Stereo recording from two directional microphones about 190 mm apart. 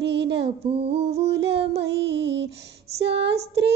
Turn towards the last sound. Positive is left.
turn(degrees=-65)  # may be behind; listen again after turning